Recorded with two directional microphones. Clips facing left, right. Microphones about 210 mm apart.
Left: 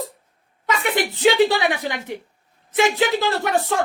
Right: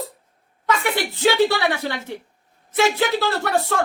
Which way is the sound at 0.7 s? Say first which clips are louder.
Even; 15° left (ahead or behind).